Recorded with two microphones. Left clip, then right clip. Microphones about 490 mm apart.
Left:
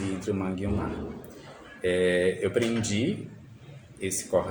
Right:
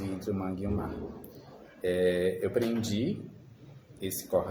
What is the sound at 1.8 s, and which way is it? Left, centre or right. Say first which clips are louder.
Speech: left 3 dB; right.